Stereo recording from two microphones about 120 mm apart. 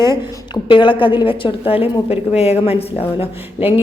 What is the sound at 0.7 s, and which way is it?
A woman's voice, 40° left (ahead or behind).